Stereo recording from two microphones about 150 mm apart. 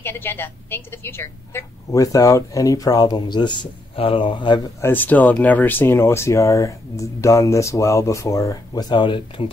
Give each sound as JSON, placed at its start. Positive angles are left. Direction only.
{"t": 0.0, "sound": "a woman's voice", "side_deg": 15}
{"t": 4.8, "sound": "a woman's voice", "side_deg": 10}